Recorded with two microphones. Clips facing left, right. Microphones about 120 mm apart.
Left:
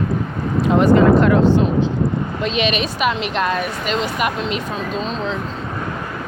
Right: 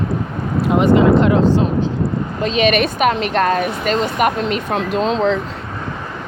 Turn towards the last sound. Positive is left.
turn(degrees=-80)